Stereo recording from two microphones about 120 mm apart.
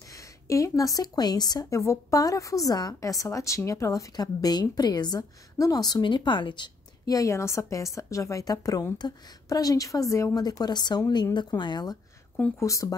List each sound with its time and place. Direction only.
0.1 s a woman's voice: 25° left (ahead or behind)
7.2 s a woman's voice: 25° left (ahead or behind)